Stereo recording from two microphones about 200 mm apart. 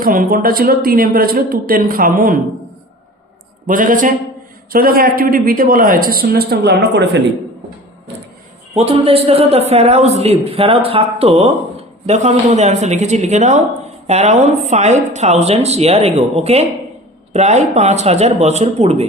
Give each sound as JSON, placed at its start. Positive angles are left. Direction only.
{"t": 0.0, "sound": "a man's voice", "side_deg": -45}
{"t": 3.7, "sound": "a man's voice", "side_deg": -40}
{"t": 8.7, "sound": "a man's voice", "side_deg": -30}